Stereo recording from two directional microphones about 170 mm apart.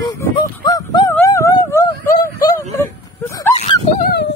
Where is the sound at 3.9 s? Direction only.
65° left (ahead or behind).